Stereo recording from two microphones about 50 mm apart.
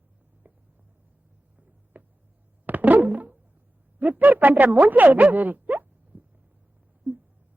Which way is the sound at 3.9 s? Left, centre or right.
Right.